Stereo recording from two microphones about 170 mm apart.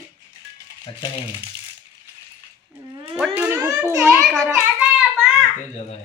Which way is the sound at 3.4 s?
20° right (ahead or behind).